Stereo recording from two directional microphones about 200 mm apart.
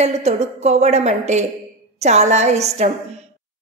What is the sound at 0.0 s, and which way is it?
A woman's voice, 35° right (ahead or behind).